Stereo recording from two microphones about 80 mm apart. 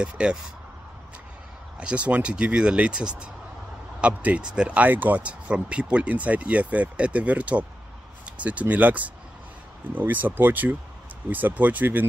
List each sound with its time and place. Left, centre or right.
0.0 s speech: centre
1.8 s speech: centre